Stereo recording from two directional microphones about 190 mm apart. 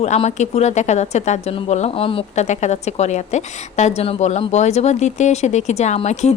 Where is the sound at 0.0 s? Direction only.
35° left (ahead or behind).